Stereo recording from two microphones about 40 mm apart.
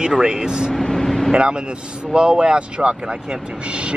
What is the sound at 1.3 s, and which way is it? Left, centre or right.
Speech, right.